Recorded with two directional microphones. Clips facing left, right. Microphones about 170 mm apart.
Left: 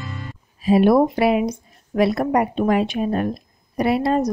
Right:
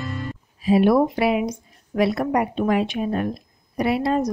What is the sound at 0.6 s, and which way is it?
Speech, 45° left (ahead or behind).